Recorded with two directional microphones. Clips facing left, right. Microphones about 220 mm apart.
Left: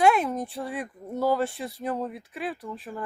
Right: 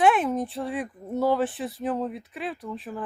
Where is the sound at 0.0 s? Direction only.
Centre (ahead or behind).